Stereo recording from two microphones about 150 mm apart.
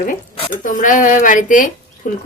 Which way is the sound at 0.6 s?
60° left (ahead or behind).